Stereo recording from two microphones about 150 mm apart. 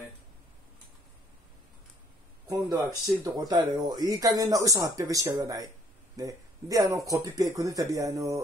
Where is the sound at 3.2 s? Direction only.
25° right (ahead or behind).